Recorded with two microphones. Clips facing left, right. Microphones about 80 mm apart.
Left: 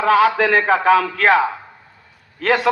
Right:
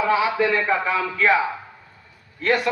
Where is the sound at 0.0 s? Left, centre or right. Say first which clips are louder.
Left 5 dB; left.